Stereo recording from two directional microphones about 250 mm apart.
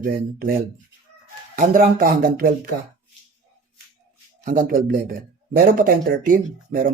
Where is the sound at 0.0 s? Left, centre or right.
Right.